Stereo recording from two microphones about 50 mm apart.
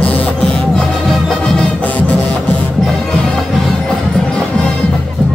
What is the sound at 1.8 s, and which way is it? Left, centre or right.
Music, left.